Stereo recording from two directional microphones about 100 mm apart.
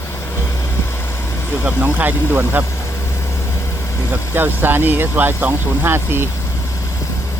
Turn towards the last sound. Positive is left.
turn(degrees=-20)  # may be behind; listen again after turning